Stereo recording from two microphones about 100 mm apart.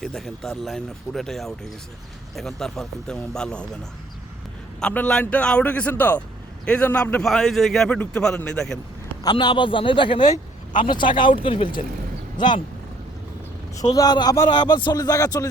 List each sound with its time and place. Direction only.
0.0 s a man's voice: centre (ahead or behind)
4.8 s a man's voice: 10° left (ahead or behind)
7.3 s a man's voice: centre (ahead or behind)
9.3 s speech: 55° left (ahead or behind)
13.8 s a man's voice: 40° left (ahead or behind)
14.5 s speech: 50° left (ahead or behind)
14.9 s a man's voice: 35° left (ahead or behind)